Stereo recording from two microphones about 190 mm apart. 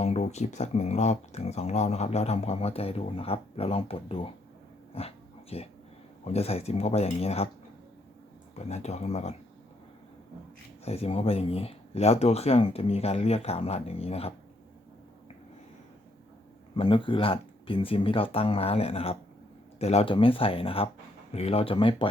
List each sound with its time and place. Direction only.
0.0 s speech: 35° left (ahead or behind)
4.9 s dog: 30° left (ahead or behind)
6.2 s speech: 30° left (ahead or behind)
8.5 s speech: 35° left (ahead or behind)
10.8 s speech: 30° left (ahead or behind)
16.7 s speech: 25° left (ahead or behind)